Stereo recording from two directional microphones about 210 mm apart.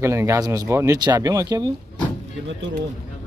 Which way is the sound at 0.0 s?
15° right (ahead or behind).